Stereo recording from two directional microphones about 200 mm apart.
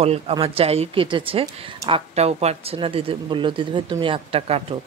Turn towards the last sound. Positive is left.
turn(degrees=-30)  # may be behind; listen again after turning